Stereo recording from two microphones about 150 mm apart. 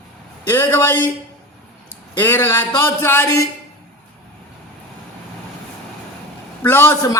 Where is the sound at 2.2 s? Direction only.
15° left (ahead or behind).